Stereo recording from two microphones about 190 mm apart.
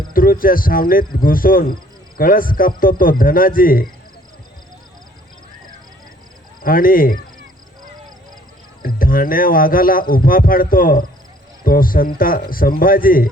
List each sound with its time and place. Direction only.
0.1 s speech: 50° left (ahead or behind)
6.6 s speech: 50° left (ahead or behind)
8.8 s speech: 50° left (ahead or behind)